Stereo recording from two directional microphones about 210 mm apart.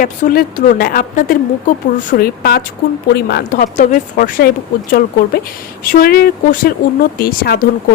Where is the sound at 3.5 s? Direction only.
40° left (ahead or behind).